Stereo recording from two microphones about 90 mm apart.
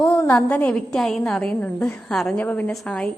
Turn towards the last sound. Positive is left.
turn(degrees=10)  # may be behind; listen again after turning